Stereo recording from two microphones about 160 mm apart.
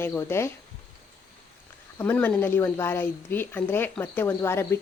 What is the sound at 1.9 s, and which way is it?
A woman's voice, 10° left (ahead or behind).